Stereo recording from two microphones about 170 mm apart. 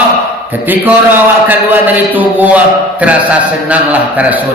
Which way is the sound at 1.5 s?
10° right (ahead or behind).